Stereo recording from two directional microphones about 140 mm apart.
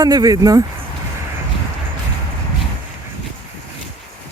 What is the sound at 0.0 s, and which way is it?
Speech, 30° right (ahead or behind).